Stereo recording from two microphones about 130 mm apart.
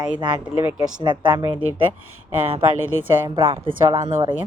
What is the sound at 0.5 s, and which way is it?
Speech, 15° right (ahead or behind).